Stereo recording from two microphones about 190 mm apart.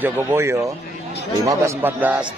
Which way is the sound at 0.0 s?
10° right (ahead or behind).